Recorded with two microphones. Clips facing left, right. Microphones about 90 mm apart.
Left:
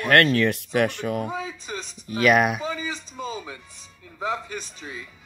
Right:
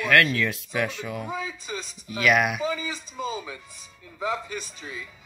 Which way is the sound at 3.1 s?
10° right (ahead or behind).